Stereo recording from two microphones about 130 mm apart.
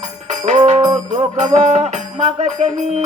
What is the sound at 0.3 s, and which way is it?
Music, 65° right (ahead or behind).